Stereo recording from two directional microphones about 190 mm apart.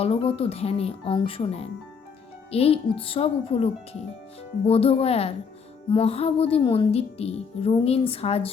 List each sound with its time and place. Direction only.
0.0 s speech: 30° left (ahead or behind)